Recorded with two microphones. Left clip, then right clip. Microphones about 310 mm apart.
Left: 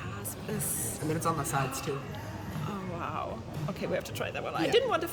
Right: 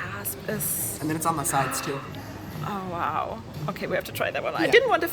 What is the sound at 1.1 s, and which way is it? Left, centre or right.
Speech, centre.